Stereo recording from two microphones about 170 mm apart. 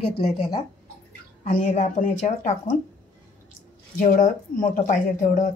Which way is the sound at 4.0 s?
50° left (ahead or behind).